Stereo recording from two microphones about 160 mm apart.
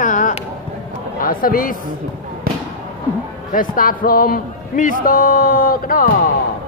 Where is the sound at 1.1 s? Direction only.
65° left (ahead or behind).